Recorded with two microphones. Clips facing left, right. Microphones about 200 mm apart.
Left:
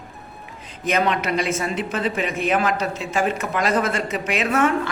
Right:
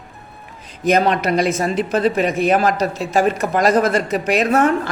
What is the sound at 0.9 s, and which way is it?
Speech, 35° right (ahead or behind).